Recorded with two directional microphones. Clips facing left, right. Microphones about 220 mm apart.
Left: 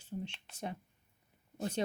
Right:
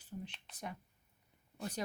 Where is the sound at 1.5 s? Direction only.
25° left (ahead or behind).